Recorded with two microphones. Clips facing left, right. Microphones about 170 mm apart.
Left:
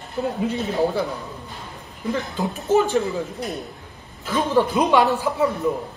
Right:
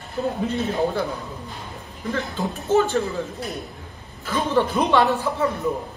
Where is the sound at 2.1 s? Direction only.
15° left (ahead or behind).